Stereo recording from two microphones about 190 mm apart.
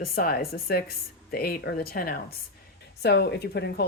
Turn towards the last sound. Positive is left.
turn(degrees=65)  # may be behind; listen again after turning